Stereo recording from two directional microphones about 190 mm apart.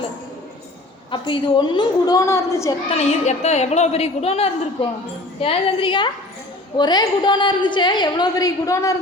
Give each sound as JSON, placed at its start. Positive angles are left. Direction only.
{"t": 1.1, "sound": "a woman's voice", "side_deg": 25}
{"t": 2.9, "sound": "a woman's voice", "side_deg": 35}